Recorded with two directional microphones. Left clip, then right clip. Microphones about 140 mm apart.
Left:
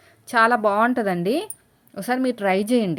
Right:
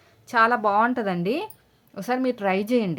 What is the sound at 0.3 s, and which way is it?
Speech, 20° left (ahead or behind).